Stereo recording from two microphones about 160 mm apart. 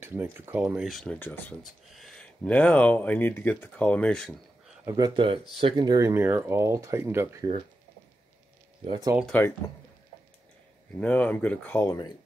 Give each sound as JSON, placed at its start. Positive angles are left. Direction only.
{"t": 0.0, "sound": "speech", "side_deg": -15}
{"t": 1.2, "sound": "speech", "side_deg": 10}
{"t": 1.6, "sound": "speech", "side_deg": 0}
{"t": 4.8, "sound": "speech", "side_deg": -25}
{"t": 9.2, "sound": "speech", "side_deg": 10}
{"t": 11.0, "sound": "speech", "side_deg": 10}